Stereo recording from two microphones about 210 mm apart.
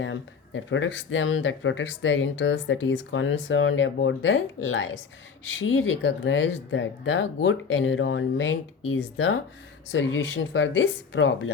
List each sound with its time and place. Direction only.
0.0 s speech: 65° left (ahead or behind)